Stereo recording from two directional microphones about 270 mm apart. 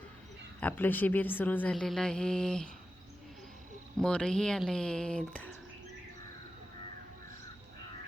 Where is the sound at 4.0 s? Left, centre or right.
Centre.